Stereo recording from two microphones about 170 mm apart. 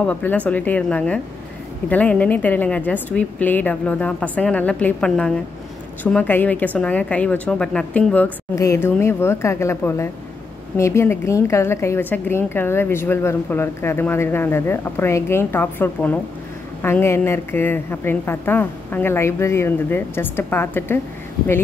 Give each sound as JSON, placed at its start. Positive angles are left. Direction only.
{"t": 0.0, "sound": "a woman's voice", "side_deg": 10}